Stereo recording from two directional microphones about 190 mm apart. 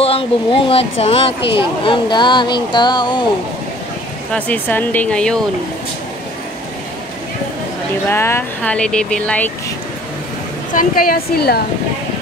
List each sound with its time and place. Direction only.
0.0 s speech: 30° left (ahead or behind)
4.3 s speech: 5° left (ahead or behind)
8.1 s speech: 15° left (ahead or behind)
10.7 s a woman's voice: 45° left (ahead or behind)